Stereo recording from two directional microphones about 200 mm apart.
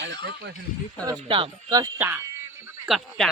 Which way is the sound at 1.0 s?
25° right (ahead or behind).